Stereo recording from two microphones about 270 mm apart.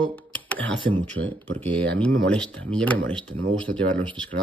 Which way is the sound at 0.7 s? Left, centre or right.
Centre.